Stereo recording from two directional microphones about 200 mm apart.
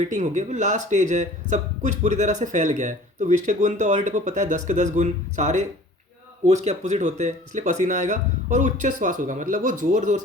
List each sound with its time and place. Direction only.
0.1 s speech: 35° right (ahead or behind)